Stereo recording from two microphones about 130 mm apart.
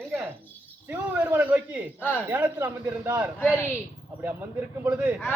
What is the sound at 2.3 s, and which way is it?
Speech, 15° right (ahead or behind).